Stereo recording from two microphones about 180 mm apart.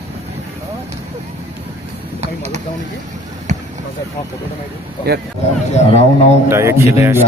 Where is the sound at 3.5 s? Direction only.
40° right (ahead or behind).